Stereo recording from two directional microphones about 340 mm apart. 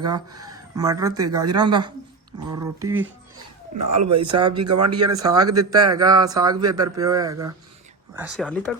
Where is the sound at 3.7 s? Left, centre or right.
Right.